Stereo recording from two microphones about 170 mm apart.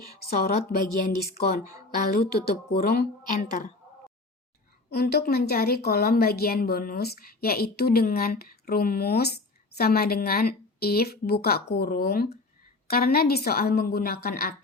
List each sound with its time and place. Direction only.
0.0 s a woman's voice: 60° left (ahead or behind)
4.9 s a woman's voice: 70° left (ahead or behind)